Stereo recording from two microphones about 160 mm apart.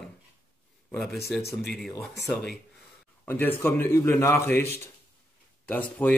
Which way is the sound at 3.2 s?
15° left (ahead or behind).